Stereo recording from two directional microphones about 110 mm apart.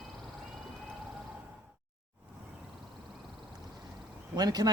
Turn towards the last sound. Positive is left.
turn(degrees=-40)  # may be behind; listen again after turning